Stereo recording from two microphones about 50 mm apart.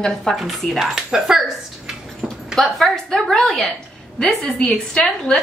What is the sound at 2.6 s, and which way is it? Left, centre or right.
A woman's voice, centre.